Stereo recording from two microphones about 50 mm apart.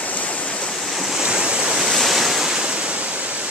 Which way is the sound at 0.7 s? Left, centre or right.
Centre.